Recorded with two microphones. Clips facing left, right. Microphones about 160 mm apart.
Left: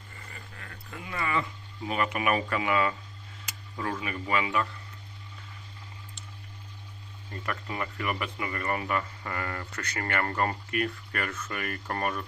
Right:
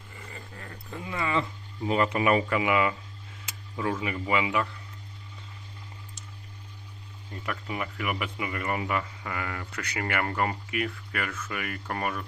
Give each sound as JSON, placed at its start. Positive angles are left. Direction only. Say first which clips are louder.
{"t": 0.3, "sound": "a sound", "louder": "right 5 dB", "side_deg": -30}
{"t": 1.9, "sound": "speech", "louder": "right 4 dB", "side_deg": -25}
{"t": 4.0, "sound": "speech", "louder": "right 2 dB", "side_deg": -20}
{"t": 7.3, "sound": "speech", "louder": "right 1 dB", "side_deg": -5}